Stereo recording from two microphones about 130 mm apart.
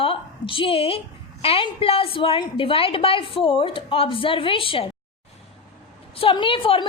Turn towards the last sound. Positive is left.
turn(degrees=45)  # may be behind; listen again after turning